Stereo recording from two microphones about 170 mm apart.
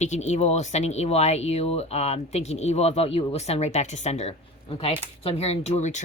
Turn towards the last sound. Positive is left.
turn(degrees=45)  # may be behind; listen again after turning